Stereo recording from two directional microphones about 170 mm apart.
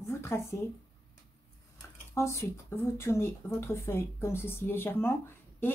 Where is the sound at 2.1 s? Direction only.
15° left (ahead or behind).